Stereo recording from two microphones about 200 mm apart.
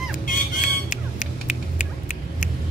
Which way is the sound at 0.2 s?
40° left (ahead or behind).